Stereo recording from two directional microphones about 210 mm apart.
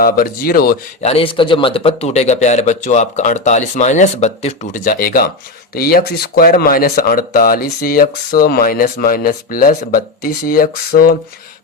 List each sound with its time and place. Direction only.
0.0 s speech: 45° left (ahead or behind)
1.0 s speech: 25° left (ahead or behind); by 11.2 s 45° left (ahead or behind)